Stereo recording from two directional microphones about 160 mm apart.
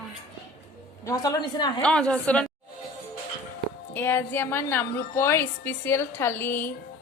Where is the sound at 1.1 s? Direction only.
20° left (ahead or behind).